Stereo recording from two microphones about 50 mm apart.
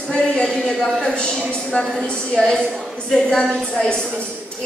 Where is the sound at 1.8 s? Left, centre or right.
Centre.